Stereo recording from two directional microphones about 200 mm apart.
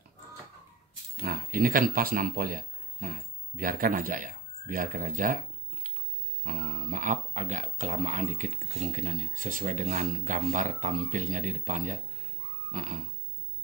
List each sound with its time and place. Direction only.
1.1 s a man's voice: 45° right (ahead or behind)
6.4 s speech: 40° right (ahead or behind)